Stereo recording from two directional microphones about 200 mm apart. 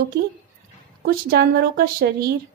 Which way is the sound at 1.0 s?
50° right (ahead or behind).